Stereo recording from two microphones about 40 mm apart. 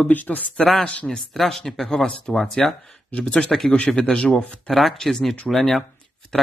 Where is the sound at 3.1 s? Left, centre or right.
Left.